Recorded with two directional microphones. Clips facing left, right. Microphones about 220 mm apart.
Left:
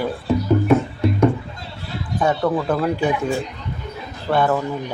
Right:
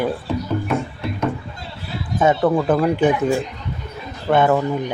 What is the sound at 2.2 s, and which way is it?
Speech, 20° right (ahead or behind).